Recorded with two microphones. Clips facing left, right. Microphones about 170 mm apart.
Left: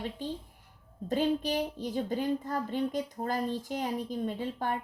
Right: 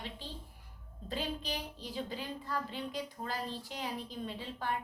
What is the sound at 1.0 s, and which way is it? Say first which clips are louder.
A woman's voice: left 10 dB; 45° left (ahead or behind).